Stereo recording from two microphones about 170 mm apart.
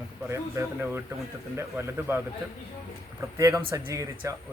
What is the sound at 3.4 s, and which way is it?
Speech, 20° right (ahead or behind).